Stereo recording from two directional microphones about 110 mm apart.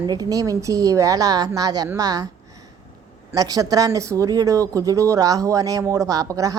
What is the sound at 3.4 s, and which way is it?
A woman's voice, 35° right (ahead or behind).